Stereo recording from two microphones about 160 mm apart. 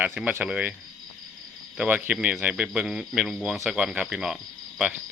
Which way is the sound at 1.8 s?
10° right (ahead or behind).